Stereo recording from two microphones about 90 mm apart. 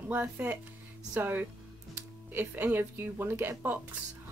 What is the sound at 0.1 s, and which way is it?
A woman's voice, 20° right (ahead or behind).